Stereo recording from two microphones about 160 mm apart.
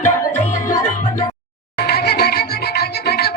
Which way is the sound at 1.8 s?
85° left.